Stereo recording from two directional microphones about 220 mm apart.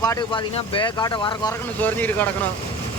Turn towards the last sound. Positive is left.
turn(degrees=10)  # may be behind; listen again after turning